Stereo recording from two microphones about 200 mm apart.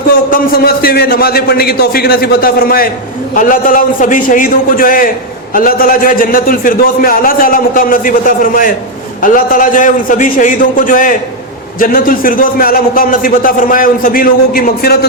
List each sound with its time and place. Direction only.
0.1 s a man's voice: 45° left (ahead or behind)